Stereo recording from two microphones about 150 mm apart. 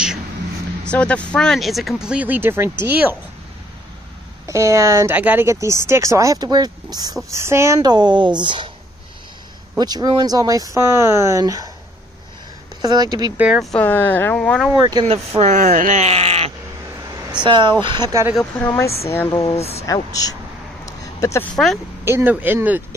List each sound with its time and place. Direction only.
0.8 s speech: 10° left (ahead or behind); by 3.2 s 10° right (ahead or behind)
4.5 s speech: 20° right (ahead or behind)
9.8 s speech: 25° right (ahead or behind)
12.8 s speech: 25° right (ahead or behind)
13.4 s speech: 5° right (ahead or behind)
13.7 s speech: 10° left (ahead or behind)
14.7 s speech: 25° right (ahead or behind)
15.0 s speech: 45° right (ahead or behind); by 18.2 s 30° right (ahead or behind)
19.0 s speech: 15° left (ahead or behind)
19.4 s speech: 45° left (ahead or behind)
19.9 s speech: 25° left (ahead or behind)
22.0 s speech: 15° right (ahead or behind)